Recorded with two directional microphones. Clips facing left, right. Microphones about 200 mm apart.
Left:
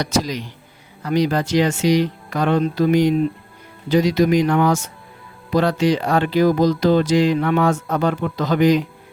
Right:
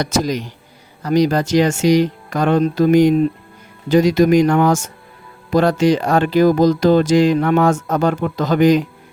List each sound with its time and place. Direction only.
0.0 s speech: 50° right (ahead or behind)